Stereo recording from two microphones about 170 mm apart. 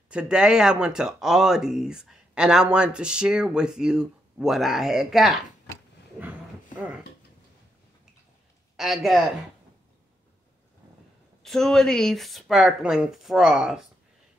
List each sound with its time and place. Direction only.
0.1 s speech: 5° right (ahead or behind)
8.7 s speech: centre (ahead or behind)
11.4 s speech: centre (ahead or behind)